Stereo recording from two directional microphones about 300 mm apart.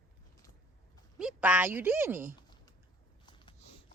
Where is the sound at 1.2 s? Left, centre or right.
Centre.